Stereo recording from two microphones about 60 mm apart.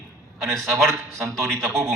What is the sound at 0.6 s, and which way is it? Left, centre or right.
Speech, right.